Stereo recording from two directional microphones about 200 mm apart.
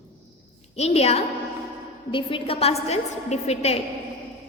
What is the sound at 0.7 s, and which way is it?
A woman's voice, 30° left (ahead or behind).